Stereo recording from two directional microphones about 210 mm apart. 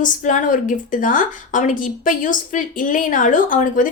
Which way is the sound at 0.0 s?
35° left (ahead or behind).